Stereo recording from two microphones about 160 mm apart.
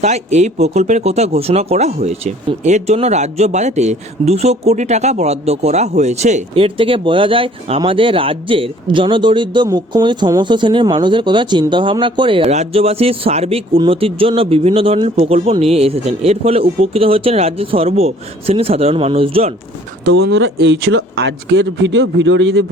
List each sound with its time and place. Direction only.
0.0 s speech: 45° right (ahead or behind)
12.5 s speech: 40° right (ahead or behind)
20.1 s speech: 90° right